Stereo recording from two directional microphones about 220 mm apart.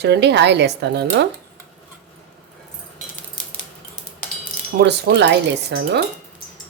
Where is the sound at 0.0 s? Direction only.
50° right (ahead or behind).